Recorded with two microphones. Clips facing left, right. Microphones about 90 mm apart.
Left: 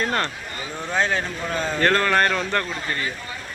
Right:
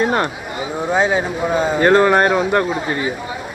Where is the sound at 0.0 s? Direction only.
15° right (ahead or behind).